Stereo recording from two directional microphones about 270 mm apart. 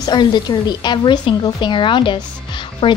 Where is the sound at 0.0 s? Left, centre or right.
Centre.